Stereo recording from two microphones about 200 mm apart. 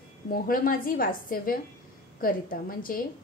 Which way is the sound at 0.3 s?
45° left (ahead or behind).